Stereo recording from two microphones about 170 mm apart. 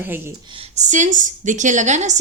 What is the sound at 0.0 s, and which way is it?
Speech, 10° right (ahead or behind).